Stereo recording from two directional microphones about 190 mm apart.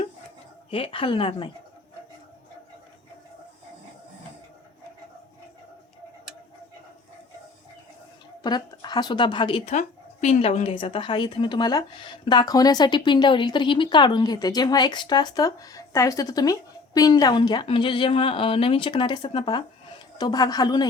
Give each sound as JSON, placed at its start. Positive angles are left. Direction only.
{"t": 0.7, "sound": "a woman's voice", "side_deg": 30}
{"t": 8.4, "sound": "a woman's voice", "side_deg": 20}
{"t": 9.7, "sound": "a woman's voice", "side_deg": 35}